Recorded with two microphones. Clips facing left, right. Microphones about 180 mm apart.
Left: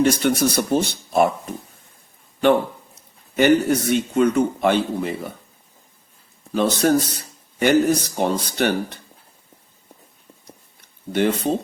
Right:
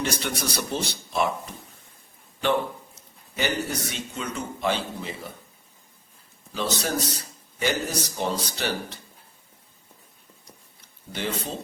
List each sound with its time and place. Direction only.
0.0 s speech: 50° left (ahead or behind)
3.3 s a man's voice: 55° left (ahead or behind)
6.5 s a man's voice: 55° left (ahead or behind)
11.1 s a man's voice: 60° left (ahead or behind)